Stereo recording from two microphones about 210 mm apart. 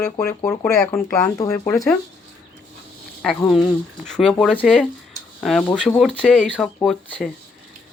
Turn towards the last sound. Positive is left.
turn(degrees=5)  # may be behind; listen again after turning